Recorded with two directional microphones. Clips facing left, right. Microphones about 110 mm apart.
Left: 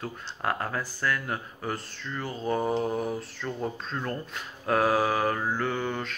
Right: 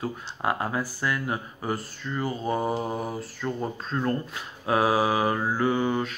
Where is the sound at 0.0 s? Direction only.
5° right (ahead or behind).